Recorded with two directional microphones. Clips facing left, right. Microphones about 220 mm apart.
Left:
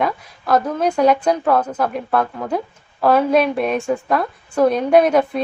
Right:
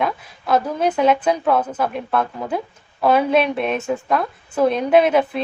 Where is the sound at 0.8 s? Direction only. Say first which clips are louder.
Left 1 dB; 5° right (ahead or behind).